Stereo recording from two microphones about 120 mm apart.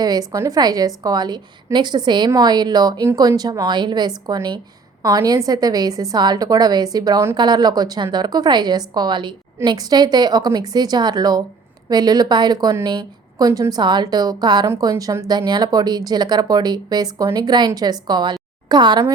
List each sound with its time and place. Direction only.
0.0 s a woman's voice: 30° right (ahead or behind)